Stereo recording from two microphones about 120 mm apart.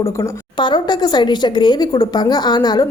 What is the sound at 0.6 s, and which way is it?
Speech, 40° left (ahead or behind).